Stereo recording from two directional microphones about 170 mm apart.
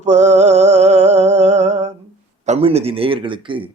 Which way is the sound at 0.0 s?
40° right (ahead or behind).